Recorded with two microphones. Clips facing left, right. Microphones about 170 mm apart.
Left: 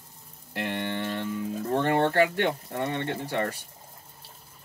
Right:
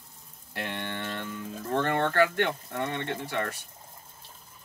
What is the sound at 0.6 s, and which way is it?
Speech, 10° left (ahead or behind).